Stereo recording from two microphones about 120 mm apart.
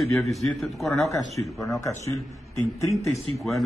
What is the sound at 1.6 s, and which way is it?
Speech, 25° left (ahead or behind).